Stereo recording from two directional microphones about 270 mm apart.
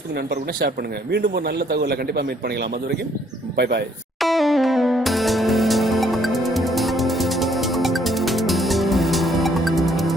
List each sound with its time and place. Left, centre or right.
1.1 s a man's voice: right
4.2 s music: centre